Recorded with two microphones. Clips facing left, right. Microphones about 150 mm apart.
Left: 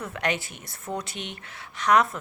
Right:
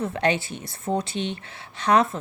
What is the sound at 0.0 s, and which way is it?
Speech, 30° right (ahead or behind).